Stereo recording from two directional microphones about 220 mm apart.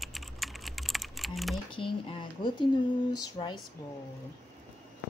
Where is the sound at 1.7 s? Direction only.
20° left (ahead or behind).